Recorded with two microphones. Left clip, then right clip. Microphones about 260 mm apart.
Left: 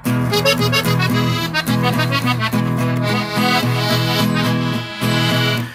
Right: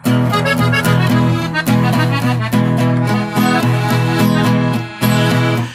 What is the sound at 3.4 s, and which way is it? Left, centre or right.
Music, left.